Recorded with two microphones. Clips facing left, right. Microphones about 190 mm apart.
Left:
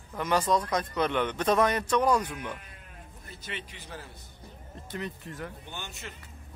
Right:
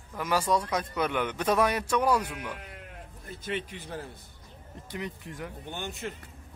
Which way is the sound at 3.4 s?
50° right (ahead or behind).